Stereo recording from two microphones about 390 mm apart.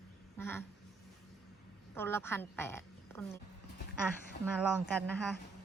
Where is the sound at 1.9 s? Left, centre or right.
Centre.